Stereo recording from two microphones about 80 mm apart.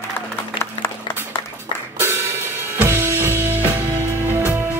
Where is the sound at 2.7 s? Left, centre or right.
Right.